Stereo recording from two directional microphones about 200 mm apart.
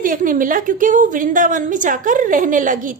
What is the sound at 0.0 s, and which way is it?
A woman's voice, 40° right (ahead or behind).